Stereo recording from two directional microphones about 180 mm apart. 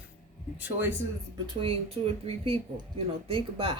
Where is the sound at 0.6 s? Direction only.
10° right (ahead or behind).